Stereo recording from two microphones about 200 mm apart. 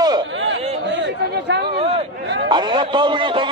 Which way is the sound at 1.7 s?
30° right (ahead or behind).